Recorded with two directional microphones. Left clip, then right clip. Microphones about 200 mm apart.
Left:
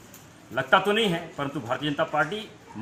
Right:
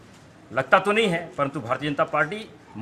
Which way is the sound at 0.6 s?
25° right (ahead or behind).